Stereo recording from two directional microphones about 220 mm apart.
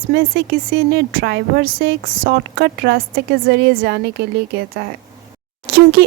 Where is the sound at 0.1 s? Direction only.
45° right (ahead or behind).